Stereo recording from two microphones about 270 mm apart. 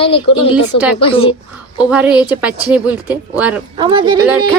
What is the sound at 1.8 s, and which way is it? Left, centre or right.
Speech, centre.